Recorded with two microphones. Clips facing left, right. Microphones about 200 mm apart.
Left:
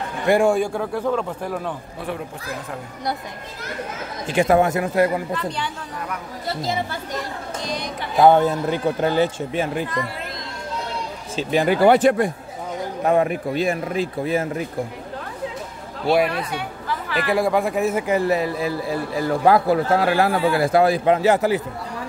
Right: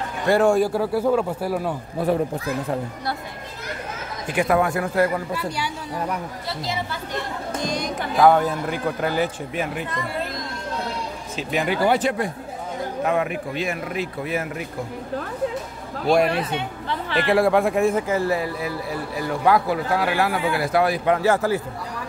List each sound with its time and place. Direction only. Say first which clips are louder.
0.3 s a man's voice: left 1 dB; 10° left (ahead or behind)
0.6 s speech: right 2 dB; 5° right (ahead or behind)
2.0 s speech: right 8 dB; 40° right (ahead or behind)
4.3 s a man's voice: left 3 dB; 25° left (ahead or behind)
7.6 s speech: right 3 dB; 45° right (ahead or behind)
8.2 s a man's voice: left 2 dB; 25° left (ahead or behind)
11.3 s speech: left 5 dB; 30° left (ahead or behind)
11.8 s speech: left 7 dB; 55° left (ahead or behind)
13.0 s speech: left 5 dB; 35° left (ahead or behind)
16.3 s a woman's voice: right 2 dB; 25° right (ahead or behind)
17.3 s speech: right 2 dB; centre (ahead or behind)
18.0 s a man's voice: left 3 dB; 15° left (ahead or behind)
19.4 s a man's voice: left 3 dB; 40° left (ahead or behind); by 21.6 s 20° left (ahead or behind)